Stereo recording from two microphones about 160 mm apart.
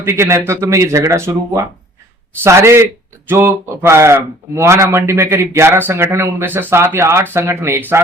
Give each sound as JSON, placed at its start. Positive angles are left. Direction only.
{"t": 0.0, "sound": "speech", "side_deg": -15}